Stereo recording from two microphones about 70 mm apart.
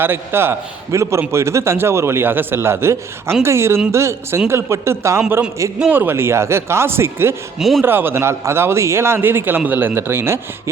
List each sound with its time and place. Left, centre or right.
0.0 s a man's voice: right
0.9 s a man's voice: right